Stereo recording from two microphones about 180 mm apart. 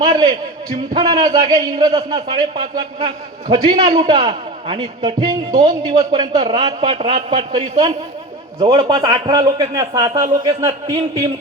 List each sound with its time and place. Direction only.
0.1 s a man's voice: 25° right (ahead or behind)